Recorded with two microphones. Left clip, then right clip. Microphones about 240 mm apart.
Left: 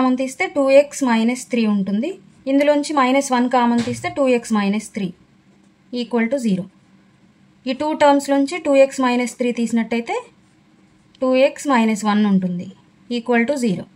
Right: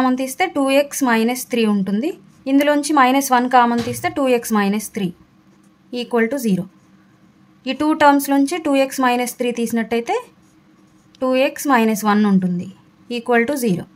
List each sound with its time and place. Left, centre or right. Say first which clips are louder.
0.0 s speech: right 1 dB; right
7.6 s speech: right 1 dB; right